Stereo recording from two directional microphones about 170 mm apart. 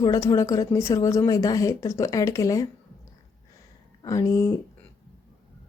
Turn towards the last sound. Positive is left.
turn(degrees=20)  # may be behind; listen again after turning